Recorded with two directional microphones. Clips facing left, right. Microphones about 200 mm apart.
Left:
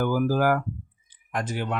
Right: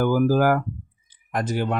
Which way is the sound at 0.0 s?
45° right (ahead or behind).